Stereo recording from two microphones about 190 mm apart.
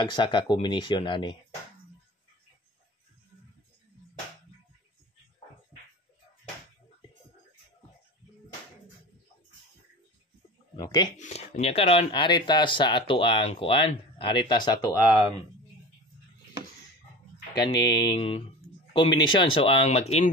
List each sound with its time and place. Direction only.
0.0 s speech: 25° left (ahead or behind)
10.8 s speech: 20° left (ahead or behind)
11.1 s speech: 40° left (ahead or behind); by 15.0 s 20° left (ahead or behind)
17.7 s speech: 70° left (ahead or behind)
18.1 s speech: 30° left (ahead or behind)